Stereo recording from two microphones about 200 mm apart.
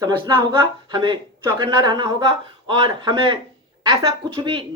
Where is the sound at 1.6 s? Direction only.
20° right (ahead or behind).